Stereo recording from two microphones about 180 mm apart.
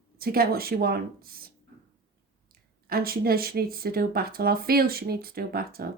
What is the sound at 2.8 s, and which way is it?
A woman's voice, 55° right (ahead or behind).